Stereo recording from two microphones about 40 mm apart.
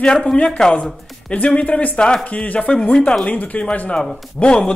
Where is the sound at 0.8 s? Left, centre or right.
Left.